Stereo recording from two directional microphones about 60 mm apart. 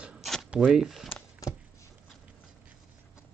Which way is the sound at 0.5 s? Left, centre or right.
Centre.